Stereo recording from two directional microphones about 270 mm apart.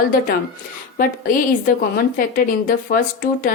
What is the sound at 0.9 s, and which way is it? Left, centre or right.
A woman's voice, left.